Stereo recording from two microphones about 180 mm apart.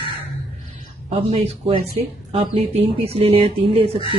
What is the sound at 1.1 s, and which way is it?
Speech, 35° right (ahead or behind).